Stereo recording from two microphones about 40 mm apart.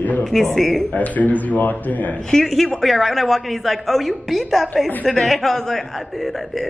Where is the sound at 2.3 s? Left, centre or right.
Centre.